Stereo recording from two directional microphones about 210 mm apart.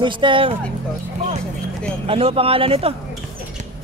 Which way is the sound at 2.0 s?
25° right (ahead or behind).